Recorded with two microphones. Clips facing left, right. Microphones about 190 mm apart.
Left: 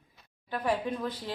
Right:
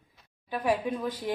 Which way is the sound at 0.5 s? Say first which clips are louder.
Right 2 dB; 10° right (ahead or behind).